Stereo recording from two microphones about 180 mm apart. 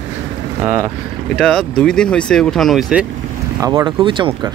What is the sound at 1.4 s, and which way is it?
Speech, 5° left (ahead or behind).